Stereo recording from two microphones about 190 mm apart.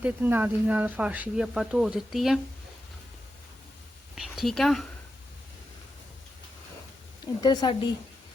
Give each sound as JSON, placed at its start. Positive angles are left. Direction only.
{"t": 0.0, "sound": "speech", "side_deg": -10}
{"t": 4.1, "sound": "speech", "side_deg": 0}
{"t": 7.4, "sound": "speech", "side_deg": 20}